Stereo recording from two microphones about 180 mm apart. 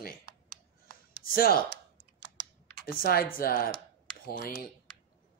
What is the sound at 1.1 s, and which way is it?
Speech, 55° left (ahead or behind).